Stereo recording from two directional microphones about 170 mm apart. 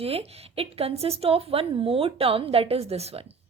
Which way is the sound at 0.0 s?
35° right (ahead or behind).